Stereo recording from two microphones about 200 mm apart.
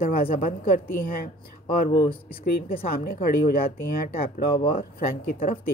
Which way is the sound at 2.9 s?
45° left (ahead or behind).